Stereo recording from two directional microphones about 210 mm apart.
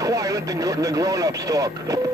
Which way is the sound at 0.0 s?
15° right (ahead or behind).